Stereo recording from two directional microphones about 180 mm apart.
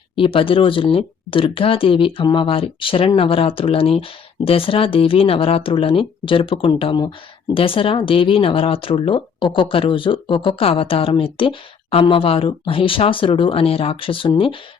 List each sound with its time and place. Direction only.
0.2 s speech: 30° left (ahead or behind)